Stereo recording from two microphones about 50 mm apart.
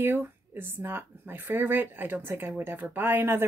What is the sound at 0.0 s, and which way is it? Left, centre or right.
Speech, right.